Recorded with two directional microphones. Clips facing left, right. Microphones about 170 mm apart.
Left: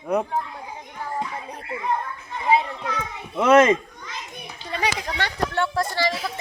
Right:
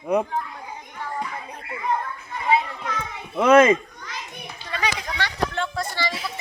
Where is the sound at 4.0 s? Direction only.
20° left (ahead or behind).